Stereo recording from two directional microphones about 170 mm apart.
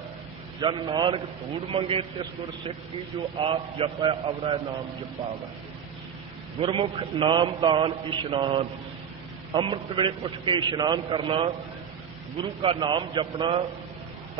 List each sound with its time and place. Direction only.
0.6 s a man's voice: 30° right (ahead or behind)
6.6 s a man's voice: 30° right (ahead or behind)